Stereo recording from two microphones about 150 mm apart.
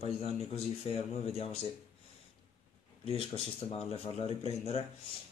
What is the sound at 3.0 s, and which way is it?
Speech, 40° left (ahead or behind).